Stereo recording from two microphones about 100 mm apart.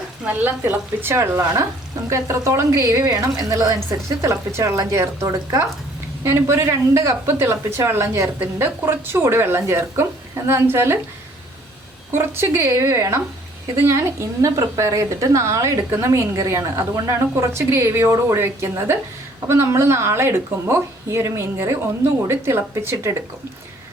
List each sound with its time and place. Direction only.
0.3 s a woman's voice: 15° right (ahead or behind)
12.1 s a woman's voice: 25° right (ahead or behind)